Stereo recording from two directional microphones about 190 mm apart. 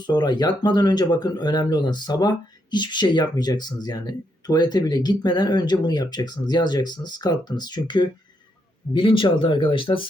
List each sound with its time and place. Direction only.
0.1 s speech: 20° left (ahead or behind)